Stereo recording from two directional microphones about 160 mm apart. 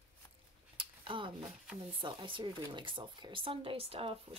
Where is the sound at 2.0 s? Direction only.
30° right (ahead or behind).